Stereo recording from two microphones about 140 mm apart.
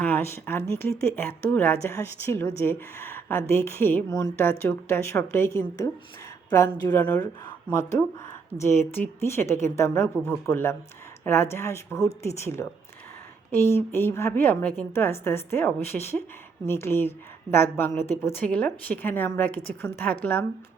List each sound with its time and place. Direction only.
0.0 s speech: 15° left (ahead or behind)
13.7 s speech: 15° left (ahead or behind)